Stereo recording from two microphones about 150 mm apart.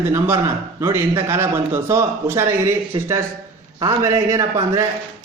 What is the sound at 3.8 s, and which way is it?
A man's voice, 25° right (ahead or behind).